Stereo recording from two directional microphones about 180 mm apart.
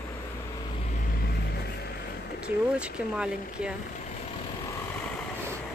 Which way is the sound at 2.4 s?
5° right (ahead or behind).